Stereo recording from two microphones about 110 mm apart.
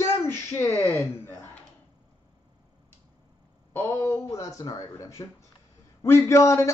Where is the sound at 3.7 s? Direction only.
25° left (ahead or behind).